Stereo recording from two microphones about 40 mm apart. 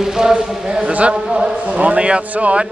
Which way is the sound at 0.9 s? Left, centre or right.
Right.